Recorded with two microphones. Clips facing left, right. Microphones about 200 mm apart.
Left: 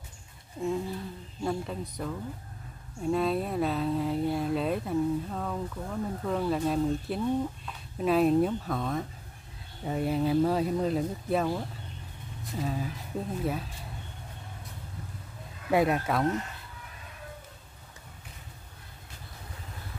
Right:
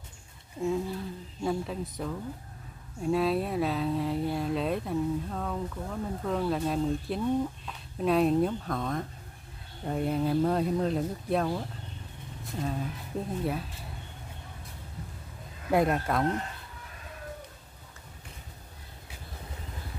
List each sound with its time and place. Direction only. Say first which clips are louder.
0.6 s a sound: right 1 dB; centre (ahead or behind)
1.4 s speech: right 1 dB; centre (ahead or behind)
15.7 s speech: even; centre (ahead or behind)